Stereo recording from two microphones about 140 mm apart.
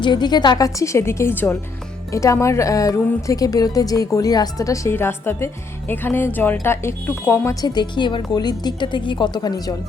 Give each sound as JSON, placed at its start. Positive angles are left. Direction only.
{"t": 0.0, "sound": "speech", "side_deg": 30}